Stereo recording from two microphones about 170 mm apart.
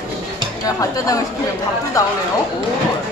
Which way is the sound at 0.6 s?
20° left (ahead or behind).